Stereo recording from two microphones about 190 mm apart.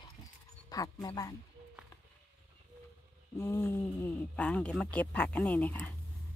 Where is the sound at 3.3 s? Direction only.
15° left (ahead or behind).